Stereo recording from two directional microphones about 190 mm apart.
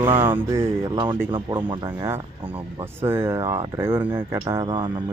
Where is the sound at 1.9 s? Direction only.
15° right (ahead or behind).